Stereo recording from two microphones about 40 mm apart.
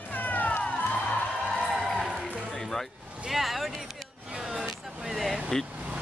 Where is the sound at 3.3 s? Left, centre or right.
Centre.